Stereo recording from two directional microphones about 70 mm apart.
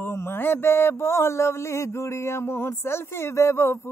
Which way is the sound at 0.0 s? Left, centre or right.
Left.